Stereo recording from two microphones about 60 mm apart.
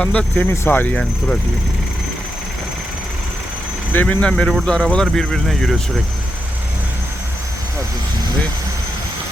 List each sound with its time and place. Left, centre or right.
0.0 s speech: centre
0.4 s speech: left
4.0 s speech: centre